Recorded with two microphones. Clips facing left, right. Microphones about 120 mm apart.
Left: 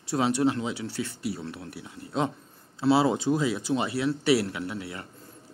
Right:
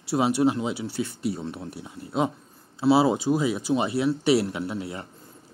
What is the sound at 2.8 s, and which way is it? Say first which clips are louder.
Speech: right 2 dB; 15° right (ahead or behind).